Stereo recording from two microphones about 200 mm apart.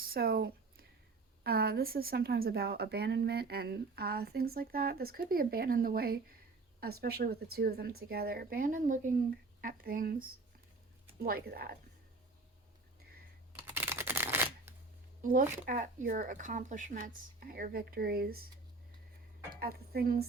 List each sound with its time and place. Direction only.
0.0 s a sound: 50° right (ahead or behind)
1.5 s a woman's voice: 50° right (ahead or behind)
13.7 s camera: 10° right (ahead or behind)
15.2 s a woman's voice: 40° right (ahead or behind)
19.5 s a woman's voice: 50° right (ahead or behind)